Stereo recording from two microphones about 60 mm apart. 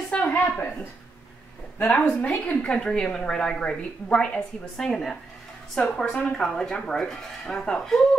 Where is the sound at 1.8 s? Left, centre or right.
Left.